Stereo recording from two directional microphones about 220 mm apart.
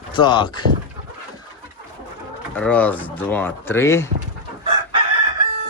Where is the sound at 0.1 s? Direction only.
20° left (ahead or behind).